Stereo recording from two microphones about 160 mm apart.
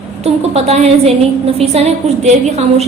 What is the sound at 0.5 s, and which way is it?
A woman's voice, 40° right (ahead or behind).